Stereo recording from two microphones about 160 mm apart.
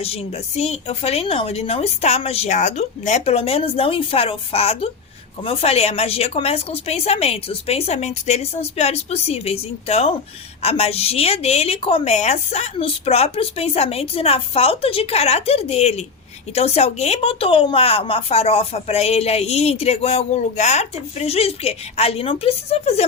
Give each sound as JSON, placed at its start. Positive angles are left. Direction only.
{"t": 0.0, "sound": "speech", "side_deg": 40}